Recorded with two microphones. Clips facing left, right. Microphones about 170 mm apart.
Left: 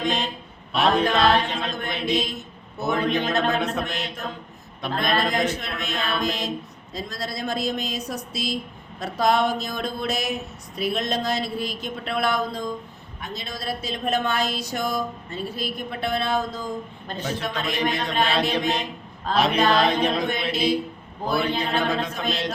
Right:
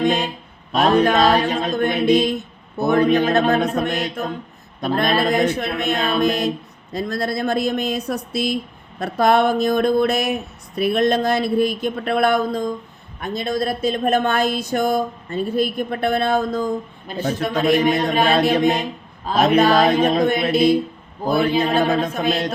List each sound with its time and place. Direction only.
0.0 s speech: 45° right (ahead or behind)